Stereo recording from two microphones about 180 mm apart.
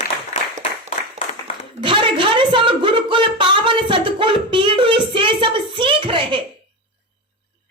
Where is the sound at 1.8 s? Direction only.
30° right (ahead or behind).